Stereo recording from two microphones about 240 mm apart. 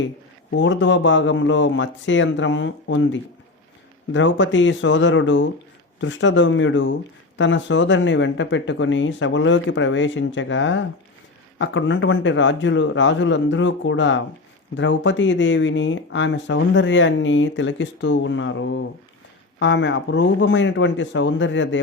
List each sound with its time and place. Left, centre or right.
0.5 s speech: left